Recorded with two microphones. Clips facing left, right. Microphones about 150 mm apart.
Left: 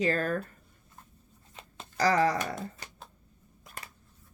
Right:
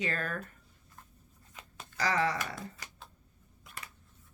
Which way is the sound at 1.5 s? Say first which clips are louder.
Left 6 dB; 35° left (ahead or behind).